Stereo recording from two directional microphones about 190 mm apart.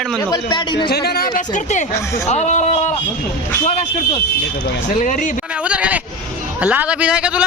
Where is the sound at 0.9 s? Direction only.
55° left (ahead or behind); by 2.9 s 35° left (ahead or behind).